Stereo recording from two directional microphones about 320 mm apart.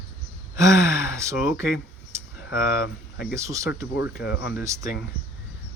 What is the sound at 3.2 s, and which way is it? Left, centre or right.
Speech, centre.